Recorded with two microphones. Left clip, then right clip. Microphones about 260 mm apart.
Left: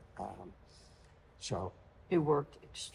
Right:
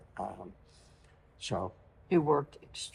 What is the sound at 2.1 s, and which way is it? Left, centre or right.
Speech, right.